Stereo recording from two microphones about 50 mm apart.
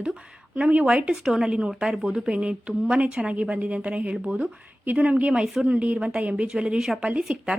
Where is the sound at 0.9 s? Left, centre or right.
Centre.